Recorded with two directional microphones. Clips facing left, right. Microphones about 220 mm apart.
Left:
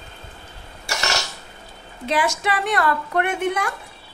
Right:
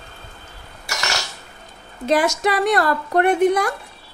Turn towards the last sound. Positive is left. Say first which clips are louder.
# right 7 dB
turn(degrees=-35)  # may be behind; listen again after turning